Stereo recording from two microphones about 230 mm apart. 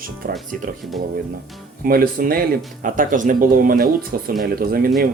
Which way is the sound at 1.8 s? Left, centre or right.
Right.